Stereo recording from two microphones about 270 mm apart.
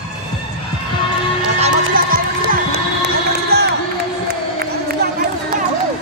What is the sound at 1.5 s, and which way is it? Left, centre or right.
Music, right.